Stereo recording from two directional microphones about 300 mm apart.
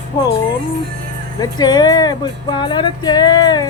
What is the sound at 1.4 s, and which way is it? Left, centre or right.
Speech, centre.